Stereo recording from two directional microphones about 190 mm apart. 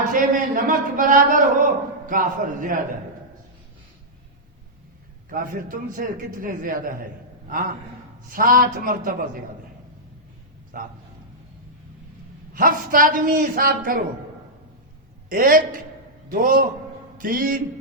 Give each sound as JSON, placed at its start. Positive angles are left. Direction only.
{"t": 0.1, "sound": "speech", "side_deg": -45}
{"t": 5.3, "sound": "speech", "side_deg": -45}
{"t": 10.7, "sound": "speech", "side_deg": -50}
{"t": 12.5, "sound": "speech", "side_deg": -45}
{"t": 15.3, "sound": "speech", "side_deg": -45}